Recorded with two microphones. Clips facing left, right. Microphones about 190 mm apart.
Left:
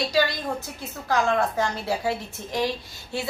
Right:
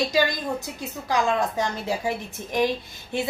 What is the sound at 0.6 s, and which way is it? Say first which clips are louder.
A woman's voice: right 3 dB; 15° right (ahead or behind).